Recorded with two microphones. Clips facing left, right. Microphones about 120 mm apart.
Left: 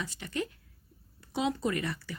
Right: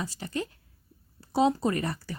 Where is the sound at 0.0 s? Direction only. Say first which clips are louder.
Right 2 dB; 35° right (ahead or behind).